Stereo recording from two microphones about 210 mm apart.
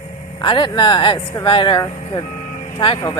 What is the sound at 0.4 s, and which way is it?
Speech, 20° left (ahead or behind).